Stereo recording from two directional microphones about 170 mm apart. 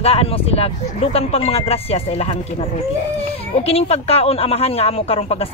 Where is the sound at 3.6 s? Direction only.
35° left (ahead or behind).